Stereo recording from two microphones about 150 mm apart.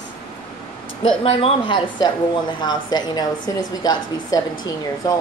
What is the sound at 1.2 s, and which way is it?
Speech, 40° left (ahead or behind).